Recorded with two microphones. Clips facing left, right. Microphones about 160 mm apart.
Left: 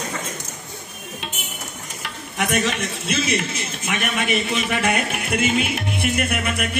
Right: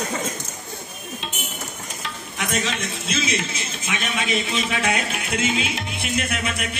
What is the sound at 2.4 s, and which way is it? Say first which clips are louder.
A man's voice: left 4 dB; 60° left (ahead or behind).